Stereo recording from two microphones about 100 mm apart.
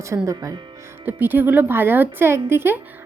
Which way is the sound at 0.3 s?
35° right (ahead or behind).